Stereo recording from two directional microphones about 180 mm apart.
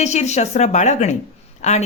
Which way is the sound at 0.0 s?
40° left (ahead or behind).